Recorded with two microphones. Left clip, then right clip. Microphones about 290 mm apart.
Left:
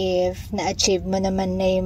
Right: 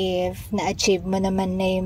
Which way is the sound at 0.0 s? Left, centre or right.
Centre.